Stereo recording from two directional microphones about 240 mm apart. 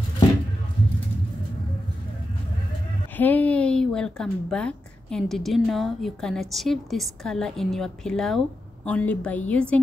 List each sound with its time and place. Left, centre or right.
3.2 s a woman's voice: centre